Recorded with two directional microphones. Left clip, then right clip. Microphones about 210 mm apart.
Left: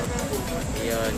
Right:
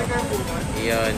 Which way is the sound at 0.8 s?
10° left (ahead or behind).